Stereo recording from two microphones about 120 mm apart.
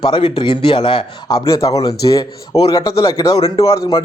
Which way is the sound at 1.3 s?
30° left (ahead or behind).